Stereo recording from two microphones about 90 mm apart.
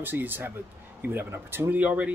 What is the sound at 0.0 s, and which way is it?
Speech, 20° right (ahead or behind).